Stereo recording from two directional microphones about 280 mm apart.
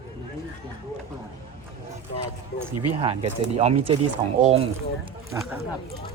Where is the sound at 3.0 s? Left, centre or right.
Centre.